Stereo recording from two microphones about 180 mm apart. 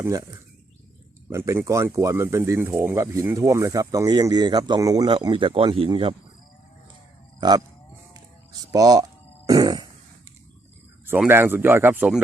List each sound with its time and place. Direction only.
0.0 s speech: 20° right (ahead or behind)
8.7 s speech: 20° right (ahead or behind)
9.5 s a sound: 20° right (ahead or behind)
11.0 s speech: 10° right (ahead or behind)